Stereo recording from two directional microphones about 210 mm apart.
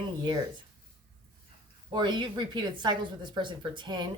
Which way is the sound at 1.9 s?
20° right (ahead or behind).